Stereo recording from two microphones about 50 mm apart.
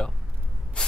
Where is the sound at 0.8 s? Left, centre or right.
Centre.